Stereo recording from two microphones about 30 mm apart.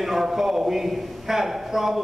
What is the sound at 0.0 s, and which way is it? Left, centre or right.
A man's voice, centre.